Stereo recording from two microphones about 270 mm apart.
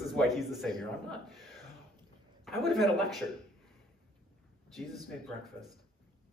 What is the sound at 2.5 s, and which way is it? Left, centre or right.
Speech, centre.